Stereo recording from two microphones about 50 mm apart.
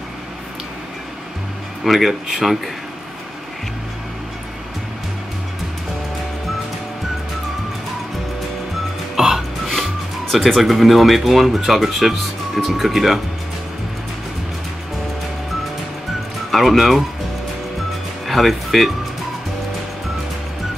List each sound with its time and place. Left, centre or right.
1.9 s speech: centre
9.1 s music: centre
10.3 s speech: centre
16.5 s speech: centre
18.2 s speech: centre